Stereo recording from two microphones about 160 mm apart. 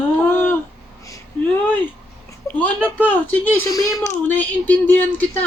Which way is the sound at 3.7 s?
20° left (ahead or behind).